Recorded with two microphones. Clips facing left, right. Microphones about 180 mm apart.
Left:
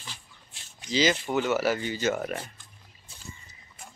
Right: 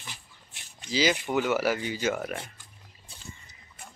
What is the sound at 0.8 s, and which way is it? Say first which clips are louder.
A man's voice: left 1 dB; 10° right (ahead or behind).